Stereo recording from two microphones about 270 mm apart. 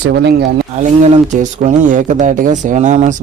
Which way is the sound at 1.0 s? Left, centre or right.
Right.